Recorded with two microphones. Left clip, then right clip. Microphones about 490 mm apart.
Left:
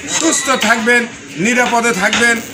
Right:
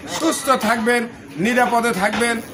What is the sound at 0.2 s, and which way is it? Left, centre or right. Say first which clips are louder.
A man's voice: left 3 dB; right.